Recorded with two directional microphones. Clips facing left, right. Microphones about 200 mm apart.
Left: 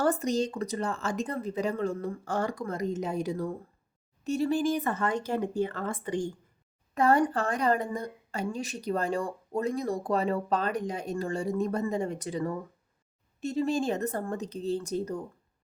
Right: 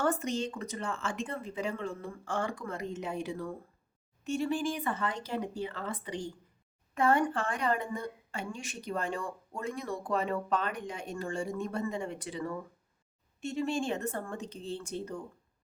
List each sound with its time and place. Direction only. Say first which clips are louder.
0.0 s a woman's voice: left 4 dB; 35° left (ahead or behind)
6.9 s a woman's voice: left 3 dB; 35° left (ahead or behind)